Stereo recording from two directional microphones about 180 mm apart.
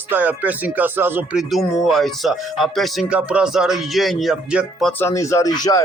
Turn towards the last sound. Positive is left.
turn(degrees=20)  # may be behind; listen again after turning